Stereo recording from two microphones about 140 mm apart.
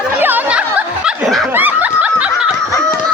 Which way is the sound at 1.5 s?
10° right (ahead or behind).